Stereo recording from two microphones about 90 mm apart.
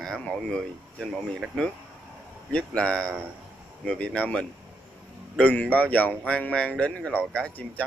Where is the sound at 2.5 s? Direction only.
15° left (ahead or behind).